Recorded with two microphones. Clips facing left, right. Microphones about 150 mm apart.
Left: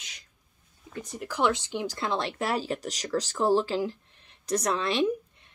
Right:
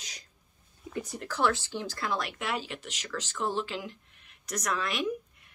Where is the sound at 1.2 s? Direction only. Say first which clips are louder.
Left 3 dB; 15° left (ahead or behind).